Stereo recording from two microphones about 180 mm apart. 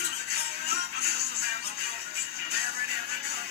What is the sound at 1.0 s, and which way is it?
Music, 60° left (ahead or behind).